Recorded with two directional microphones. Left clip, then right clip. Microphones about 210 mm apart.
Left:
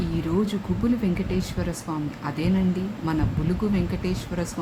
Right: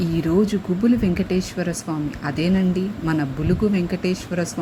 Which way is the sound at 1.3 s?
15° right (ahead or behind).